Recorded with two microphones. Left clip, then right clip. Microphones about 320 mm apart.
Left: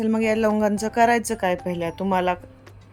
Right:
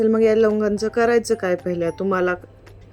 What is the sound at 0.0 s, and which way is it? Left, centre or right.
Speech, centre.